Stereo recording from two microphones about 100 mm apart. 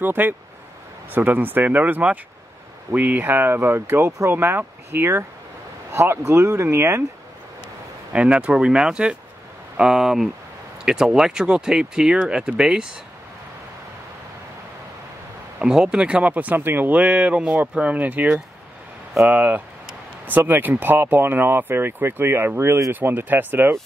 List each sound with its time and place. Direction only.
0.0 s speech: 20° right (ahead or behind)
8.1 s speech: 10° right (ahead or behind)
15.6 s speech: 10° right (ahead or behind)